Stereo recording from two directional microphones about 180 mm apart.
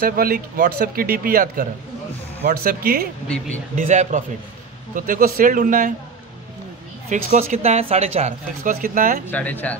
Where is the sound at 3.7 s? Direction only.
45° right (ahead or behind).